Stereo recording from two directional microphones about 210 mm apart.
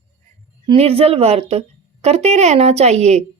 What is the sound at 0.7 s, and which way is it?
Speech, 25° right (ahead or behind).